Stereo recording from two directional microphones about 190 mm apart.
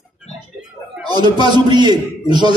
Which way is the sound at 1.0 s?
20° right (ahead or behind).